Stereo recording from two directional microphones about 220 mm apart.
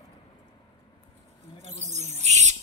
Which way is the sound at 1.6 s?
30° right (ahead or behind).